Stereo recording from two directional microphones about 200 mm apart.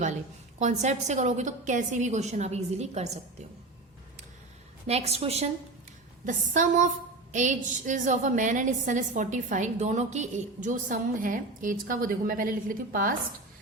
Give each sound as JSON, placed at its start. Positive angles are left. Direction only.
{"t": 0.6, "sound": "a woman's voice", "side_deg": -35}
{"t": 4.9, "sound": "a woman's voice", "side_deg": -30}